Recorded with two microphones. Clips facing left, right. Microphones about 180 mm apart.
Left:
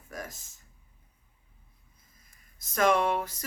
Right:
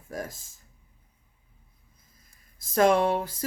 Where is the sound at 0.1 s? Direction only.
30° right (ahead or behind).